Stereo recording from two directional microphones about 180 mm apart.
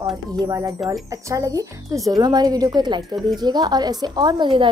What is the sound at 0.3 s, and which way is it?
A woman's voice, 20° right (ahead or behind).